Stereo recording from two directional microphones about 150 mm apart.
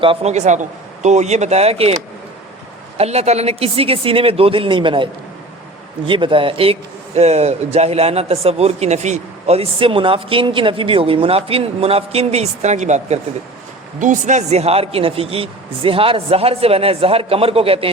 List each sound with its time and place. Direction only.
0.0 s a man's voice: 40° right (ahead or behind)
3.0 s speech: 45° right (ahead or behind)
6.1 s speech: 35° right (ahead or behind)